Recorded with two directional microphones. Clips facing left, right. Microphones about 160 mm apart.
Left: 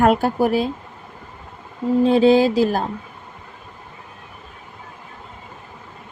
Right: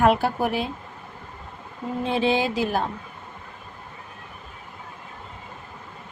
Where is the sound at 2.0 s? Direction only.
35° left (ahead or behind).